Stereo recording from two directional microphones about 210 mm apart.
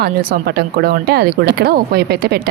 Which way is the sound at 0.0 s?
45° right (ahead or behind).